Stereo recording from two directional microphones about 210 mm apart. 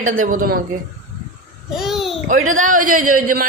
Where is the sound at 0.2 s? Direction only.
40° right (ahead or behind).